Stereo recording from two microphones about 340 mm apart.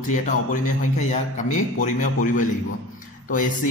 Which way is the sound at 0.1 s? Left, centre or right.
Left.